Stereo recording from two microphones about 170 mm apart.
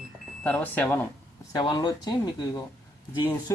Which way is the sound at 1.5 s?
25° left (ahead or behind).